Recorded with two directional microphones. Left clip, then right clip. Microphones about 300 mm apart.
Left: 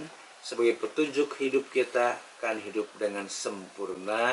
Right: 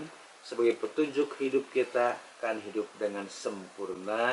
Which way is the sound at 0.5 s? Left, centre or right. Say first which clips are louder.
Left 1 dB; centre.